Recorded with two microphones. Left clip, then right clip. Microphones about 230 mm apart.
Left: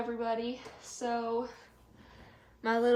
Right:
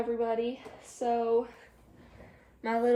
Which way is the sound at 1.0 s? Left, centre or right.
Left.